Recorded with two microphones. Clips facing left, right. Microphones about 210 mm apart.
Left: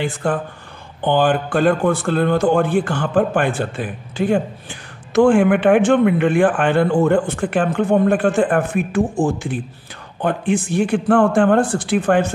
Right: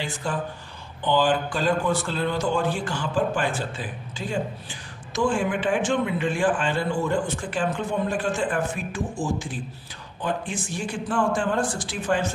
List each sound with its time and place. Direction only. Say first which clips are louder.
0.0 s speech: left 8 dB; 55° left (ahead or behind)